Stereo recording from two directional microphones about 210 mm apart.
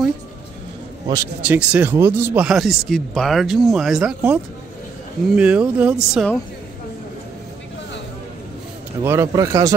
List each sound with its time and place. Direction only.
1.0 s speech: 15° right (ahead or behind)
9.0 s a man's voice: 10° right (ahead or behind)